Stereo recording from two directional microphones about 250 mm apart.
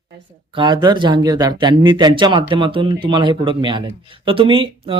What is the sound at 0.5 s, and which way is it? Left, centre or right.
A man's voice, centre.